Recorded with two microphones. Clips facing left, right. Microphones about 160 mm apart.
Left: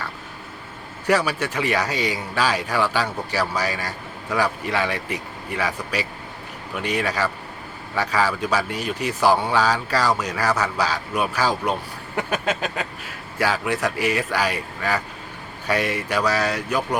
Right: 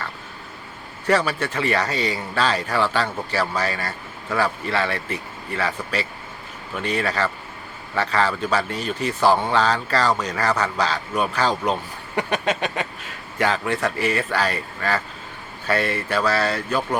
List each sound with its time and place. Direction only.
1.0 s speech: 10° left (ahead or behind)